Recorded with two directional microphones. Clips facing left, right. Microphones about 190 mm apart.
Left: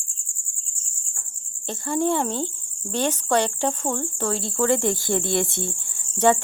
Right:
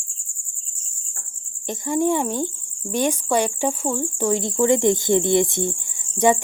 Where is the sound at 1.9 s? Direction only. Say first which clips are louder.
Right 2 dB; 15° right (ahead or behind).